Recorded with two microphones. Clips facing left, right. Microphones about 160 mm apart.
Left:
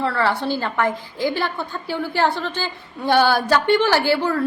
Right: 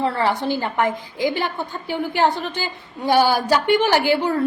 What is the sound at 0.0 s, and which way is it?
A woman's voice, 20° right (ahead or behind).